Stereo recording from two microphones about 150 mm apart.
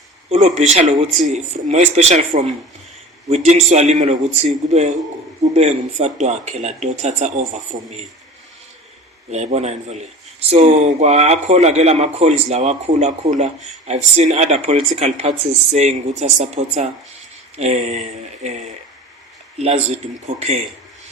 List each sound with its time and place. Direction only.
0.3 s a man's voice: 50° right (ahead or behind)
9.3 s a man's voice: 45° right (ahead or behind)